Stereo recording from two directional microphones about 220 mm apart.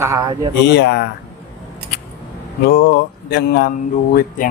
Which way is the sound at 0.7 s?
50° left (ahead or behind).